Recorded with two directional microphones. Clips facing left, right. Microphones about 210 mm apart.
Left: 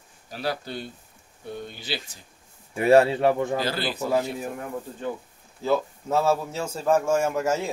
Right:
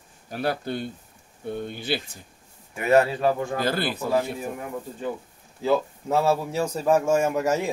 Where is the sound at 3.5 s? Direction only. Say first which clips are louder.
Right 1 dB; 50° right (ahead or behind).